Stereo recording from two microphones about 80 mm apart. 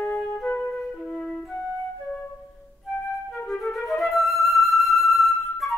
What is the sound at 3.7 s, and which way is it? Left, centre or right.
Flute, centre.